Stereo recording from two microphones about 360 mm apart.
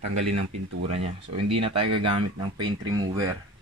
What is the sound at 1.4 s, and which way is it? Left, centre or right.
Speech, centre.